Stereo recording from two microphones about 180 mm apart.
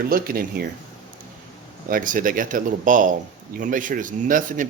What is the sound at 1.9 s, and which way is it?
Speech, 50° right (ahead or behind).